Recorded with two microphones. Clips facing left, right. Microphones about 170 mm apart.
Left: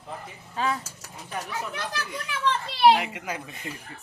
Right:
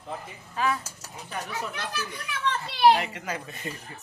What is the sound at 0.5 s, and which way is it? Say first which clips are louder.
Speech: even; 30° left (ahead or behind).